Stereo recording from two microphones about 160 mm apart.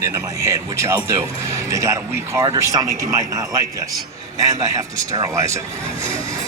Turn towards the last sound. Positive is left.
turn(degrees=-20)  # may be behind; listen again after turning